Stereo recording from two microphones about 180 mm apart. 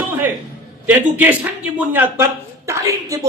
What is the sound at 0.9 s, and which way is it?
A man's voice, 10° right (ahead or behind).